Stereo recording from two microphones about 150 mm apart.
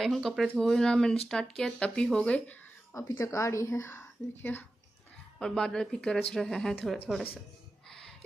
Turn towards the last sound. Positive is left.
turn(degrees=0)  # may be behind; listen again after turning